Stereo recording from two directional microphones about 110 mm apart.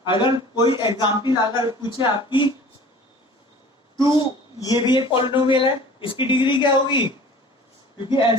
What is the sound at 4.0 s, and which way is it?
Speech, 45° left (ahead or behind).